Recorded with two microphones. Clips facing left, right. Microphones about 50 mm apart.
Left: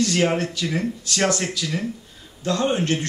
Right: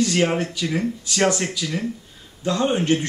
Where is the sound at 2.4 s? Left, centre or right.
Centre.